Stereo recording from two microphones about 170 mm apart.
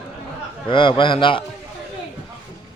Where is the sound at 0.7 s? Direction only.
30° left (ahead or behind).